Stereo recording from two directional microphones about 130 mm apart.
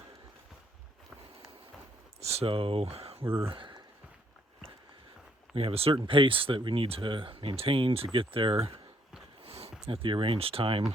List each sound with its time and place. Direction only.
2.2 s speech: 50° right (ahead or behind)
3.5 s a sound: 40° right (ahead or behind)
5.5 s speech: 45° right (ahead or behind)